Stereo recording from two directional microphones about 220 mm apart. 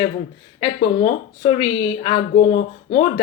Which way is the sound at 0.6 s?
25° left (ahead or behind).